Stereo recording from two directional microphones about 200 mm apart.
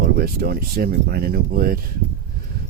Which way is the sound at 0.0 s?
50° right (ahead or behind).